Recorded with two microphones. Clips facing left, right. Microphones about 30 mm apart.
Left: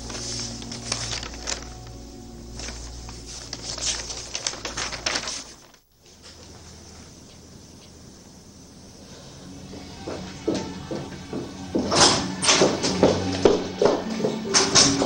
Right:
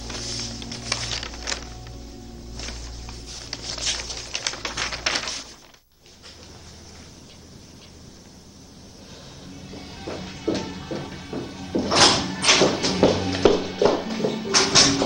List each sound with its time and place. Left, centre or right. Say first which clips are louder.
0.0 s music: right 1 dB; right
2.5 s a sound: right 1 dB; centre
9.4 s music: right 1 dB; centre